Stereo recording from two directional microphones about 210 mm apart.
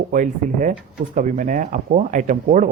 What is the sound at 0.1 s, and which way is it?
Speech, 40° right (ahead or behind).